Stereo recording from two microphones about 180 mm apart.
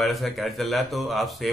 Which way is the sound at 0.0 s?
Centre (ahead or behind).